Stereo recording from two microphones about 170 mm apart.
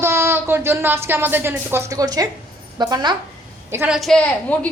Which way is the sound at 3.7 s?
15° right (ahead or behind).